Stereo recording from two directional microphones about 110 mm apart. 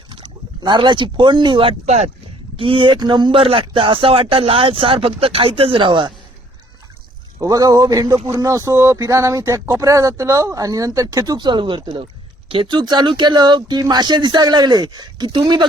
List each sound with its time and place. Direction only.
0.1 s speech: 45° right (ahead or behind)
7.3 s speech: 35° right (ahead or behind)